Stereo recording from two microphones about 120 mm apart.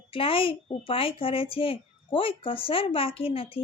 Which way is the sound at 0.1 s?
50° left (ahead or behind).